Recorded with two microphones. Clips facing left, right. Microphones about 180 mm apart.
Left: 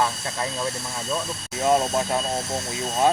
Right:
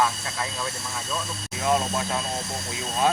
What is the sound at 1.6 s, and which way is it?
Speech, 35° left (ahead or behind).